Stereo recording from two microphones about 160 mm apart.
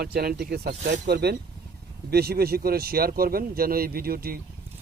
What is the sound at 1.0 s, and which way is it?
Speech, 90° right.